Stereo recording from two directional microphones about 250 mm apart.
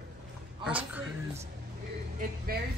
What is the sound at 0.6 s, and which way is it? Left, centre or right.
Speech, centre.